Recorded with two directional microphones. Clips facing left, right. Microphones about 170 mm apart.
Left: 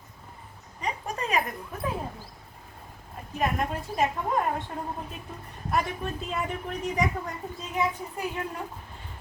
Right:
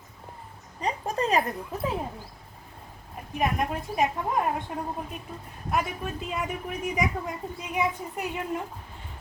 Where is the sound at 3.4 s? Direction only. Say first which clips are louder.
Right 1 dB; 15° right (ahead or behind).